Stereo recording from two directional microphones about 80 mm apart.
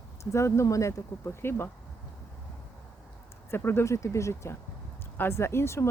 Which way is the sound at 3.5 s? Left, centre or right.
Left.